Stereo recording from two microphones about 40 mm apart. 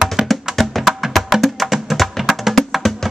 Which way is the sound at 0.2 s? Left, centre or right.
Centre.